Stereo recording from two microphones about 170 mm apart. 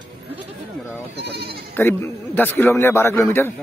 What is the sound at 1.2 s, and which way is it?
Sheep, 75° right (ahead or behind).